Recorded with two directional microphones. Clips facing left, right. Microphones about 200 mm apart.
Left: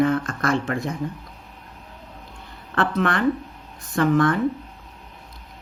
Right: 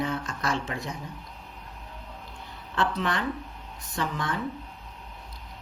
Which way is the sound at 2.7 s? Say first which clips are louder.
Left 6 dB; 55° left (ahead or behind).